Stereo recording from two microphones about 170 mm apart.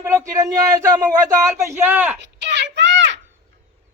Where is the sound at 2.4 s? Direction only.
90° right.